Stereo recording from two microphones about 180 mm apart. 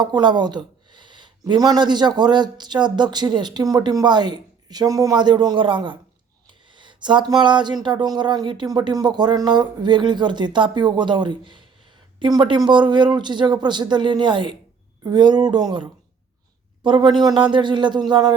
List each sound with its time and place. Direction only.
0.0 s speech: 25° right (ahead or behind)